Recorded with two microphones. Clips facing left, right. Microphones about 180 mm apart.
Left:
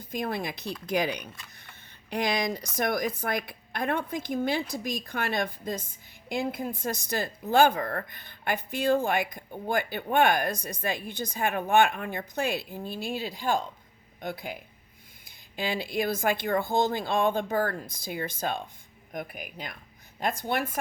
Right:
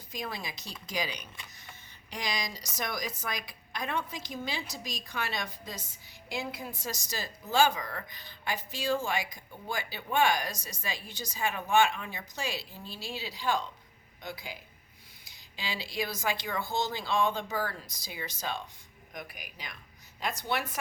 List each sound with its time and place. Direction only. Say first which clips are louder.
0.1 s speech: left 7 dB; 55° left (ahead or behind)